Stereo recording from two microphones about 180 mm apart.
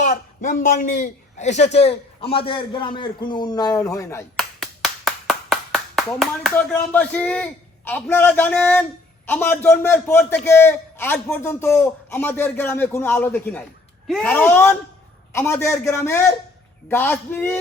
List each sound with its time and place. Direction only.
0.0 s a man's voice: 45° left (ahead or behind); by 4.2 s 20° left (ahead or behind)
4.4 s clapping: centre (ahead or behind)
6.6 s a man's voice: 10° left (ahead or behind)